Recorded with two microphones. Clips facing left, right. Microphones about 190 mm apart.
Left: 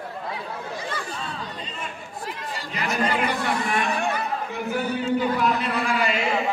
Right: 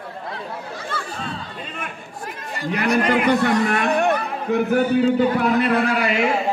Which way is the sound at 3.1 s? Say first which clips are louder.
Right 7 dB; 60° right (ahead or behind).